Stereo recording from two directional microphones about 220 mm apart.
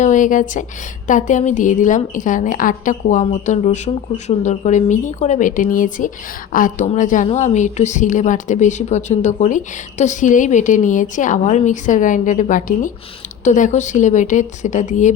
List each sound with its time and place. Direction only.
0.0 s a woman's voice: 35° left (ahead or behind)